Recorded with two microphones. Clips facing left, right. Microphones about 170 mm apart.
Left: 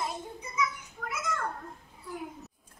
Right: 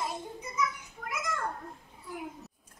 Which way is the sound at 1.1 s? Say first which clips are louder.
Left 1 dB; centre (ahead or behind).